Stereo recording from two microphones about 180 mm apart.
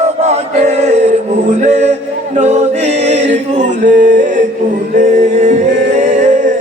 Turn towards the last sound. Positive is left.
turn(degrees=-45)  # may be behind; listen again after turning